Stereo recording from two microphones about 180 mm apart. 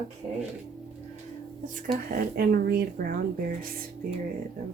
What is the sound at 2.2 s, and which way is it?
Speech, 55° right (ahead or behind).